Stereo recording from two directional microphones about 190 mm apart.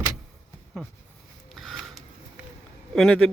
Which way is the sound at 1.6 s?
Centre (ahead or behind).